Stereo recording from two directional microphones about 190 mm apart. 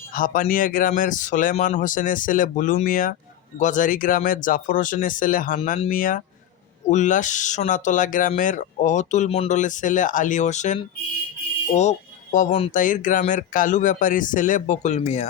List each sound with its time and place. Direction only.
0.1 s a man's voice: 45° left (ahead or behind)
12.8 s a man's voice: 45° left (ahead or behind)